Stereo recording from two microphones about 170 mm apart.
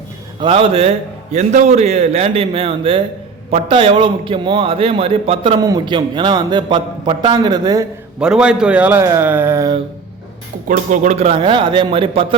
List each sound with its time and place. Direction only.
0.3 s a man's voice: 30° right (ahead or behind)
5.5 s a man's voice: 20° right (ahead or behind)
8.2 s a man's voice: 5° right (ahead or behind)
10.7 s speech: 45° right (ahead or behind)
11.3 s a man's voice: 30° right (ahead or behind)